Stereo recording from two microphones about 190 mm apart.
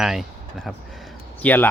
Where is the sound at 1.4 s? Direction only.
10° left (ahead or behind).